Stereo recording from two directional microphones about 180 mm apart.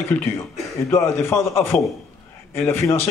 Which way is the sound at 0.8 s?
15° left (ahead or behind).